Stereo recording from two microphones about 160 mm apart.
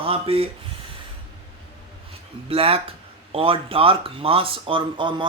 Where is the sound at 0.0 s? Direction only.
35° right (ahead or behind).